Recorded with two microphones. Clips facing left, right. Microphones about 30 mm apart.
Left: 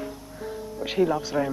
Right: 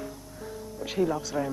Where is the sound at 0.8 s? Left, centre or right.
Left.